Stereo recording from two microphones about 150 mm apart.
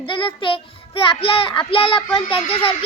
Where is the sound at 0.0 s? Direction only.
35° left (ahead or behind).